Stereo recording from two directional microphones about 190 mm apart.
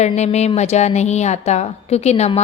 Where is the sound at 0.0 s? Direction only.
35° left (ahead or behind).